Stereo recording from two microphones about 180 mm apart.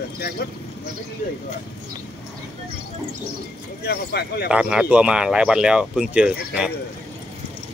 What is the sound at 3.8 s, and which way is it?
Speech, 60° left (ahead or behind).